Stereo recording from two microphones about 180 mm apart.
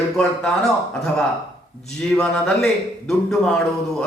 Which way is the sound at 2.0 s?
5° left (ahead or behind).